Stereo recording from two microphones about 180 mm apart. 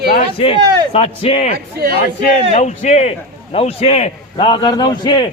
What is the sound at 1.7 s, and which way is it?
Speech, 60° right (ahead or behind).